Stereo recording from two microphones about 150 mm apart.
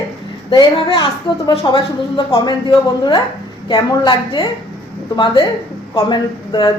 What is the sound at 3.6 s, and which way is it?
Speech, 30° left (ahead or behind).